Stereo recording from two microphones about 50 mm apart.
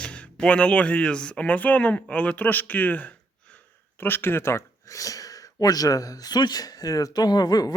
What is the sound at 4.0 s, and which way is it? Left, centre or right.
Speech, left.